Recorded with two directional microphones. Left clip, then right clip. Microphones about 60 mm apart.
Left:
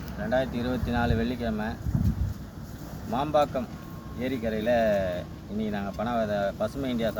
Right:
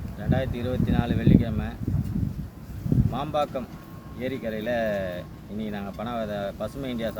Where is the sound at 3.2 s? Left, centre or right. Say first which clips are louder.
Left 4 dB; centre.